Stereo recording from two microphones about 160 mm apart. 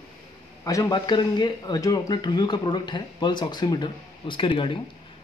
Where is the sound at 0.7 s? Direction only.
20° left (ahead or behind).